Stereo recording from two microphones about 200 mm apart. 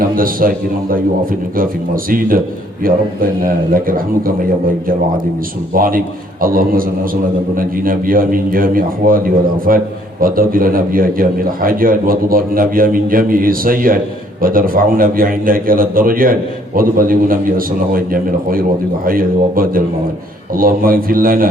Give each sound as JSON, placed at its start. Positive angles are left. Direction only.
{"t": 0.2, "sound": "a man's voice", "side_deg": -45}
{"t": 5.7, "sound": "a man's voice", "side_deg": -45}